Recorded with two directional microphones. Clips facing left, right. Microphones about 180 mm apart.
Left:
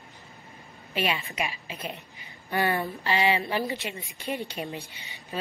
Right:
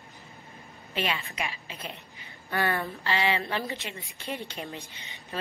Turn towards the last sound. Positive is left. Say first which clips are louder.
# left 4 dB
turn(degrees=15)  # may be behind; listen again after turning